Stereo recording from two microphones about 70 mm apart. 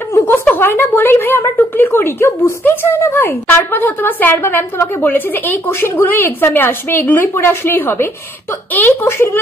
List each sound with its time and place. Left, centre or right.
0.6 s a woman's voice: left